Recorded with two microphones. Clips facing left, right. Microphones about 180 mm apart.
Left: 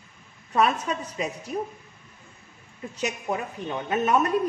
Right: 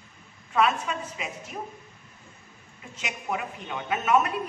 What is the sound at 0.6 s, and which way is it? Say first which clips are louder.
Speech: left 1 dB; 40° left (ahead or behind).